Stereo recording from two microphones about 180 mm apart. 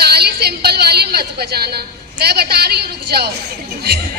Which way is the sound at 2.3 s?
65° right (ahead or behind).